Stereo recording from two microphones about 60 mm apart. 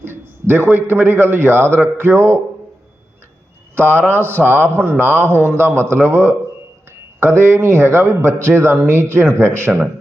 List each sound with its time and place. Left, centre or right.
0.0 s a man's voice: right
3.8 s a man's voice: right